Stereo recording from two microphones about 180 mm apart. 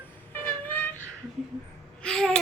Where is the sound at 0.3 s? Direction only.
10° left (ahead or behind).